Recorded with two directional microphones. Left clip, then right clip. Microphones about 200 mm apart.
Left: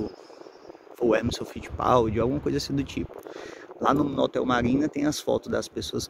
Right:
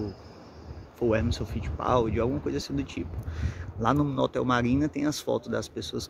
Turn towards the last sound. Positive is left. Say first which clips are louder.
# left 3 dB
turn(degrees=15)  # may be behind; listen again after turning